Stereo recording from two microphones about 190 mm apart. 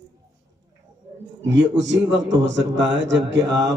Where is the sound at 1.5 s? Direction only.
70° right (ahead or behind).